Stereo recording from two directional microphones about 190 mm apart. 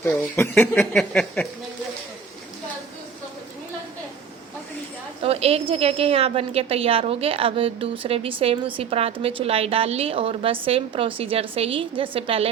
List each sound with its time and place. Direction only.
0.0 s speech: 15° left (ahead or behind)
5.2 s a woman's voice: 30° right (ahead or behind)